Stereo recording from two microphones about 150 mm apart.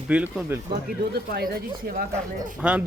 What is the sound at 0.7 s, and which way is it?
Speech, 90° right.